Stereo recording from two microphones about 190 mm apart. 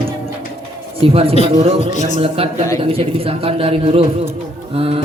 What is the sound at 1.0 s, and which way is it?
A man's voice, 30° right (ahead or behind).